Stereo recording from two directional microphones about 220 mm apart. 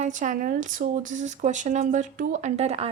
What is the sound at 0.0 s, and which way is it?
Speech, 35° right (ahead or behind).